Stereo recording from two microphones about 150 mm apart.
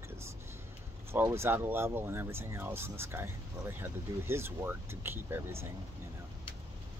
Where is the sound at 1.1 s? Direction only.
15° right (ahead or behind).